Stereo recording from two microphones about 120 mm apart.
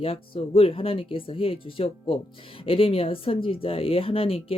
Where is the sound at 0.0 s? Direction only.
50° left (ahead or behind).